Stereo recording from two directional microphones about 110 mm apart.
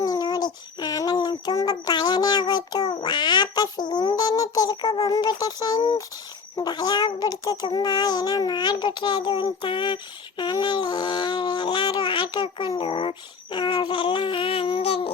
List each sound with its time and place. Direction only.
0.0 s child singing: 35° left (ahead or behind)
3.0 s a sound: 45° left (ahead or behind)
4.1 s child singing: 35° left (ahead or behind)
6.6 s a child's voice: 40° left (ahead or behind); by 15.1 s 60° left (ahead or behind)